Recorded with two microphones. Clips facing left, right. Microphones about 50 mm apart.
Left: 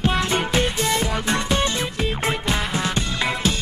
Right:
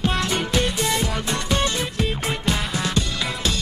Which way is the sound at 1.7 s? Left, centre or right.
Left.